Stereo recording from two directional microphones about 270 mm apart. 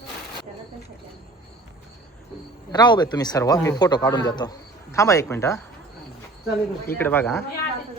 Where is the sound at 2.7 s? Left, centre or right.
Centre.